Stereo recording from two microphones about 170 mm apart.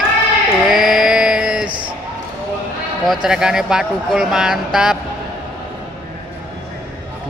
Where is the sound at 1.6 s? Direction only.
25° right (ahead or behind).